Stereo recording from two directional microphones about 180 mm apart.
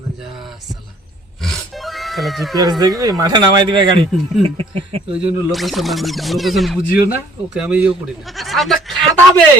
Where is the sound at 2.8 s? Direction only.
20° right (ahead or behind).